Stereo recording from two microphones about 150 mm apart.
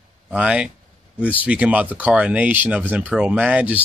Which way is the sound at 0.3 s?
5° right (ahead or behind).